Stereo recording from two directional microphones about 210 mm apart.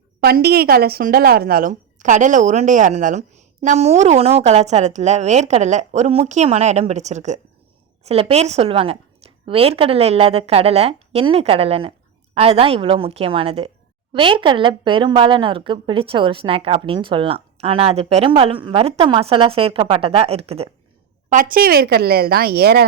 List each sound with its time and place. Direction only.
0.2 s a woman's voice: 45° right (ahead or behind); by 20.7 s 30° right (ahead or behind)
21.2 s a woman's voice: 40° right (ahead or behind)